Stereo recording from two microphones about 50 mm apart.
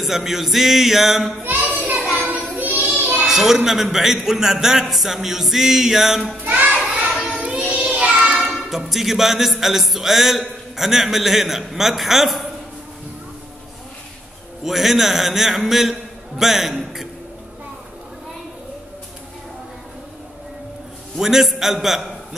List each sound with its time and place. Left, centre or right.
0.0 s a man's voice: centre
1.6 s a sound: right
2.1 s child singing: right
3.1 s a man's voice: centre
6.4 s children playing: right
6.9 s child singing: right
8.6 s a man's voice: centre
14.6 s a man's voice: centre
21.2 s a man's voice: centre